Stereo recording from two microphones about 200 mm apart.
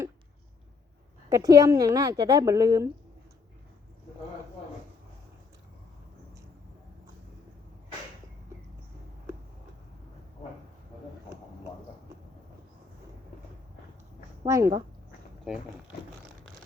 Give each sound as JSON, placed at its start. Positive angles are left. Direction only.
{"t": 1.3, "sound": "speech", "side_deg": -15}
{"t": 14.4, "sound": "speech", "side_deg": -15}